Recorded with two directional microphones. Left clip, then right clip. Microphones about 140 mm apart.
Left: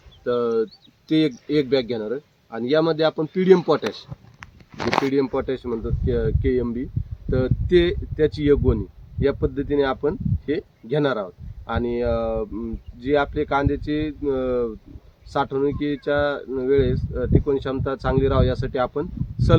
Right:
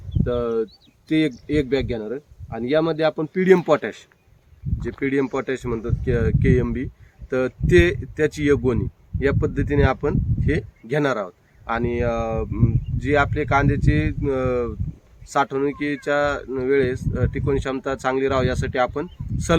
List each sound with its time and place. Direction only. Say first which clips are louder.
0.3 s speech: left 2 dB; 15° right (ahead or behind)
5.0 s speech: even; 10° right (ahead or behind)